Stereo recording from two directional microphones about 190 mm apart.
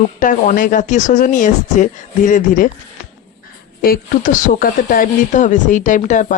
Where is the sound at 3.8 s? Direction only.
50° left (ahead or behind).